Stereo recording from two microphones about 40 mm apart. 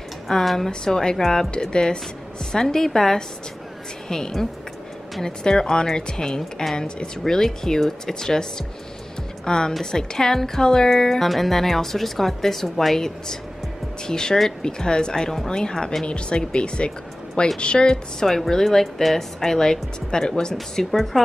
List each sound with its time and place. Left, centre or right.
0.3 s speech: centre
0.7 s speech: centre
1.7 s speech: centre
16.1 s speech: left
18.2 s speech: centre
20.7 s speech: centre